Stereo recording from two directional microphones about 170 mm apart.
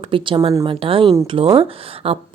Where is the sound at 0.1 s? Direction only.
30° right (ahead or behind).